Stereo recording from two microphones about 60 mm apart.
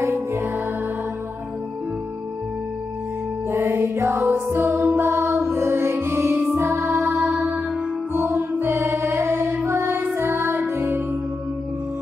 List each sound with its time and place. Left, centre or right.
0.0 s music: right
3.4 s music: right